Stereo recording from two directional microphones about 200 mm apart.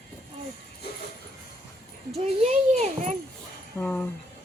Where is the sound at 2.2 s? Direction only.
30° right (ahead or behind).